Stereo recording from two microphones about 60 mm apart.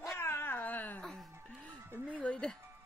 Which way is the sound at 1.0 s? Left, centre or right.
Centre.